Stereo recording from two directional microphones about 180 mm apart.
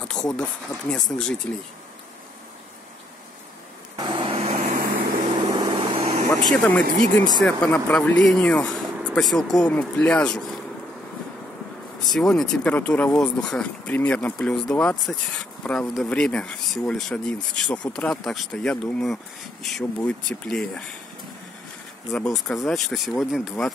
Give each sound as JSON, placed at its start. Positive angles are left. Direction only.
{"t": 0.0, "sound": "a sound", "side_deg": 5}
{"t": 0.4, "sound": "speech", "side_deg": 5}
{"t": 3.9, "sound": "vehicle", "side_deg": -25}
{"t": 5.3, "sound": "vehicle", "side_deg": -25}
{"t": 6.5, "sound": "speech", "side_deg": 5}
{"t": 12.1, "sound": "speech", "side_deg": 5}
{"t": 22.1, "sound": "speech", "side_deg": 5}